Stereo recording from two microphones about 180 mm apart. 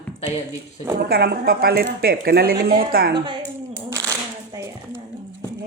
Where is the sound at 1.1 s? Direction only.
60° right (ahead or behind).